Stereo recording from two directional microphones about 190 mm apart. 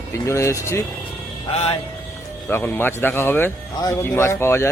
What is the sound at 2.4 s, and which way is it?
Speech, 10° left (ahead or behind).